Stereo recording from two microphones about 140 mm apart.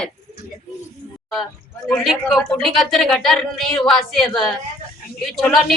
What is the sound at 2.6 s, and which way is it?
A woman's voice, centre (ahead or behind).